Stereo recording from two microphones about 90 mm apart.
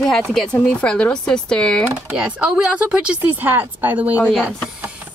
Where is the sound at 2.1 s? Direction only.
10° right (ahead or behind).